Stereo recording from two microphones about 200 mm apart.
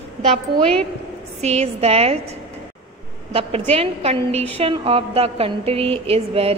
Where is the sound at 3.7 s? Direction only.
30° right (ahead or behind).